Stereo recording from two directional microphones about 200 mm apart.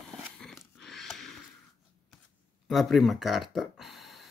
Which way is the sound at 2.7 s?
Centre (ahead or behind).